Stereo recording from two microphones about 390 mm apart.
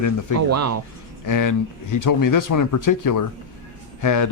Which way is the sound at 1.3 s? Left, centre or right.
Left.